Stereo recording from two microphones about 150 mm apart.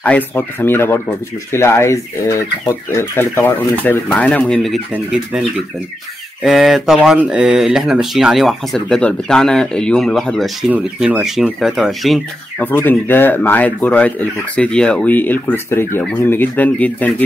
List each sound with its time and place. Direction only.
0.0 s speech: 10° left (ahead or behind)
6.4 s speech: centre (ahead or behind)
12.6 s speech: 15° left (ahead or behind)